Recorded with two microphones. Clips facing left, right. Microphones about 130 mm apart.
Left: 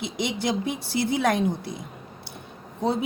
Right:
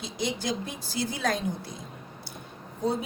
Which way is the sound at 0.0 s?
65° left (ahead or behind).